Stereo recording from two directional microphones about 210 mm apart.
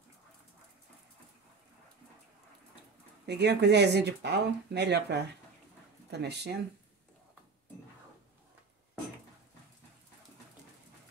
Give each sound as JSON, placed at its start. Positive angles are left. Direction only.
{"t": 3.3, "sound": "speech", "side_deg": -50}